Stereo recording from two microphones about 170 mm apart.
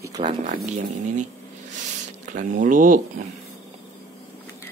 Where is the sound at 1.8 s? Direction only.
45° right (ahead or behind).